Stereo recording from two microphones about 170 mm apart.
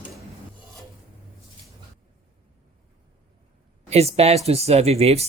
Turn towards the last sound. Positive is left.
turn(degrees=-40)  # may be behind; listen again after turning